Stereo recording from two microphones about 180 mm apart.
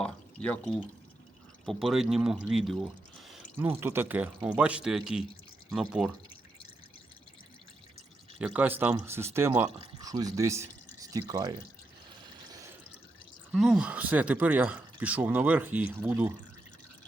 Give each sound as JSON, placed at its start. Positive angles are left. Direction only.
{"t": 0.0, "sound": "a sound", "side_deg": 5}
{"t": 1.6, "sound": "speech", "side_deg": 0}
{"t": 3.7, "sound": "speech", "side_deg": -10}
{"t": 8.4, "sound": "speech", "side_deg": -10}
{"t": 13.5, "sound": "speech", "side_deg": -5}